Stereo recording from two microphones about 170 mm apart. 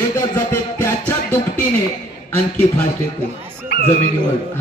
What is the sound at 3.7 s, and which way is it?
Dog, 80° left.